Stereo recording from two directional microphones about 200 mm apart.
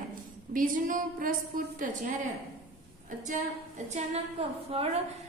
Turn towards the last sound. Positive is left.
turn(degrees=-30)  # may be behind; listen again after turning